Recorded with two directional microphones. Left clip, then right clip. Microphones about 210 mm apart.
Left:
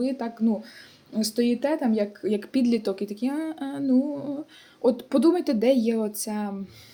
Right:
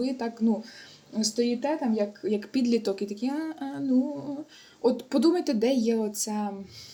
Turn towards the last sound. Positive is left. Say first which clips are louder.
# even
turn(degrees=15)  # may be behind; listen again after turning